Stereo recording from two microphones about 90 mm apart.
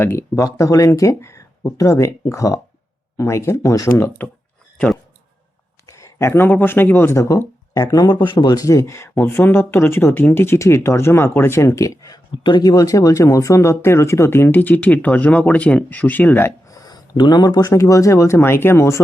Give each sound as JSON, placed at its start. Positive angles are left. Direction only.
{"t": 0.0, "sound": "speech", "side_deg": 25}
{"t": 5.8, "sound": "speech", "side_deg": 35}
{"t": 7.7, "sound": "speech", "side_deg": 40}
{"t": 8.6, "sound": "speech", "side_deg": 35}
{"t": 12.7, "sound": "speech", "side_deg": 40}
{"t": 16.6, "sound": "speech", "side_deg": 45}